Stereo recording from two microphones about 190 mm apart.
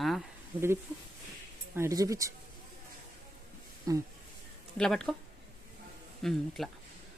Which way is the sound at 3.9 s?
20° right (ahead or behind).